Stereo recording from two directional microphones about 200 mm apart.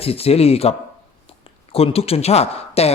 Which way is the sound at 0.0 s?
30° left (ahead or behind).